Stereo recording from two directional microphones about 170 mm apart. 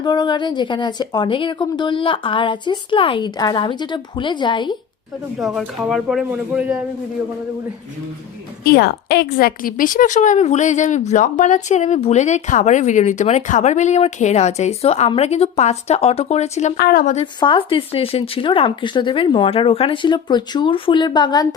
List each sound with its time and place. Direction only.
0.0 s speech: 25° left (ahead or behind)
5.4 s speech: centre (ahead or behind)
8.6 s a woman's voice: 70° left (ahead or behind); by 16.7 s 40° left (ahead or behind)
16.7 s a woman's voice: 65° left (ahead or behind)
17.4 s speech: 30° left (ahead or behind)